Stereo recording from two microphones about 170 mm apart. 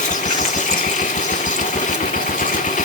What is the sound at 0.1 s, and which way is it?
Engine, 50° left (ahead or behind).